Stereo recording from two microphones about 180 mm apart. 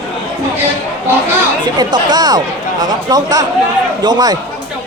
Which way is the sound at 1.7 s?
20° right (ahead or behind).